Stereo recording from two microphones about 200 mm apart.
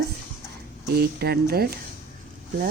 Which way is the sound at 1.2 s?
50° right (ahead or behind).